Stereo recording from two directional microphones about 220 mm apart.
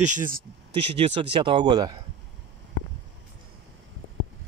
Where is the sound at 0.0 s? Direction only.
35° right (ahead or behind).